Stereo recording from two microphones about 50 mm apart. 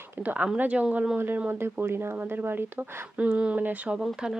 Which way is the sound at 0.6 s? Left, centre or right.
Right.